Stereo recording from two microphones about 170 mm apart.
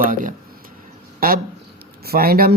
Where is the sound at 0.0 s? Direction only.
55° right (ahead or behind).